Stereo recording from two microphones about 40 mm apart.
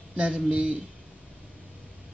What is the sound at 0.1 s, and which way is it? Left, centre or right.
Speech, right.